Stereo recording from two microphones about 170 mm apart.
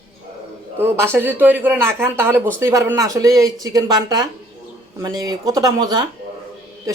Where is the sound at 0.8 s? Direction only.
15° right (ahead or behind).